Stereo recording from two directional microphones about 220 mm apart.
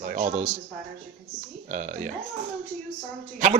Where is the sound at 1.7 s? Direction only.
35° right (ahead or behind).